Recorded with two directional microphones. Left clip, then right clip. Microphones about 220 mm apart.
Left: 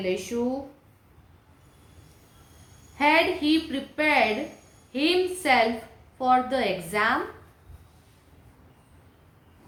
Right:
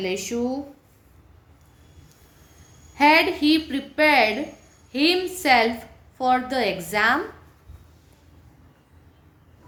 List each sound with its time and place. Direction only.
0.0 s a woman's voice: 50° right (ahead or behind)
2.9 s a woman's voice: 50° right (ahead or behind)